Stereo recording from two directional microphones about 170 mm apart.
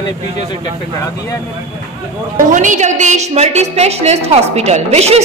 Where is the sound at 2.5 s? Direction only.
45° right (ahead or behind).